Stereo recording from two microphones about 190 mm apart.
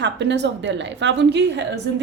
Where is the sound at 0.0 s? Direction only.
65° right (ahead or behind).